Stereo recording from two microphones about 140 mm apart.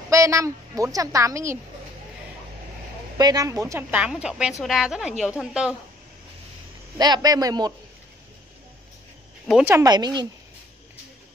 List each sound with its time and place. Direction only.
0.1 s a woman's voice: 20° right (ahead or behind)
3.2 s a woman's voice: 25° right (ahead or behind)
4.0 s a woman's voice: 5° right (ahead or behind)
7.0 s a woman's voice: 30° right (ahead or behind)
9.7 s a woman's voice: 20° right (ahead or behind)
9.9 s a woman's voice: 30° right (ahead or behind)